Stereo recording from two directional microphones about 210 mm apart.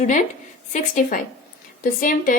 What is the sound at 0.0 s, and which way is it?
Speech, 35° left (ahead or behind).